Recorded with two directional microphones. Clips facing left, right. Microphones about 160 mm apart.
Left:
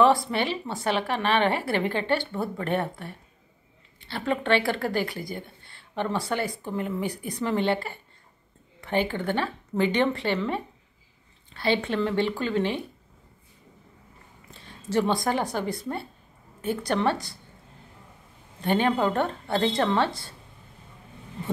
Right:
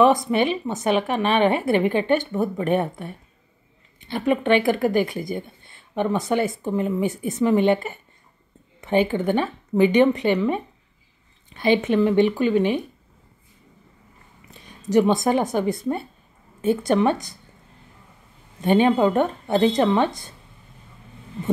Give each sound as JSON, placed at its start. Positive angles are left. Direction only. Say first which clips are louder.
{"t": 0.0, "sound": "a woman's voice", "louder": "right 4 dB", "side_deg": -20}
{"t": 14.5, "sound": "a woman's voice", "louder": "right 7 dB", "side_deg": -15}
{"t": 18.6, "sound": "a woman's voice", "louder": "right 6 dB", "side_deg": -20}